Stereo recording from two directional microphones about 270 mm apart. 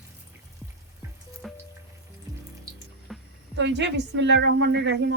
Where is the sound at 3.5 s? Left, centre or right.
Right.